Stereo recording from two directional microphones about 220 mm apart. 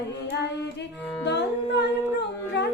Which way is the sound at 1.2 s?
50° left (ahead or behind).